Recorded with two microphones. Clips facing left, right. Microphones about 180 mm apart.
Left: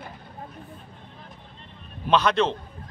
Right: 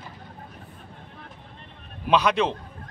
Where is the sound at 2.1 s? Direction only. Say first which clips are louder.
Even; 10° right (ahead or behind).